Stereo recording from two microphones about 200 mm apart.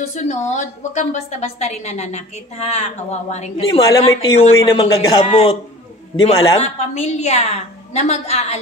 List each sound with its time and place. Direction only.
0.1 s a woman's voice: 35° left (ahead or behind)